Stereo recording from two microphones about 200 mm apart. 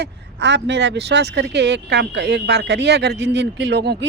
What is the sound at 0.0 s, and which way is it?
Speech, 60° right (ahead or behind).